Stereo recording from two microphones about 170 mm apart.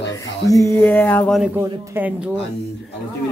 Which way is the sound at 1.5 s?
10° right (ahead or behind).